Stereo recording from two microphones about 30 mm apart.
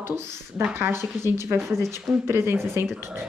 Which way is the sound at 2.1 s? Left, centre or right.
Centre.